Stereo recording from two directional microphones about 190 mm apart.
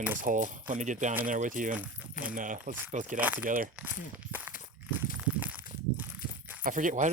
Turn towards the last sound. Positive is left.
turn(degrees=-40)  # may be behind; listen again after turning